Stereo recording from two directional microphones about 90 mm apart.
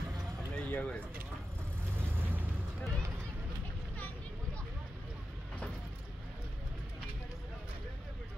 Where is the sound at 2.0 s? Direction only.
25° right (ahead or behind).